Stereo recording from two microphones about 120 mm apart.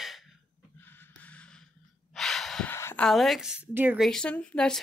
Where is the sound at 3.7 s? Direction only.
15° right (ahead or behind).